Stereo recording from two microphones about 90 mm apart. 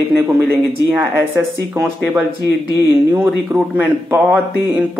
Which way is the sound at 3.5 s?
20° right (ahead or behind).